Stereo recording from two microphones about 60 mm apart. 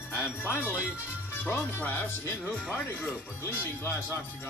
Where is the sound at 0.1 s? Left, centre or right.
Left.